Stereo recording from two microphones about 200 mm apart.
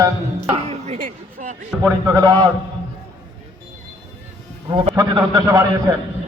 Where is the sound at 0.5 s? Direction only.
30° right (ahead or behind).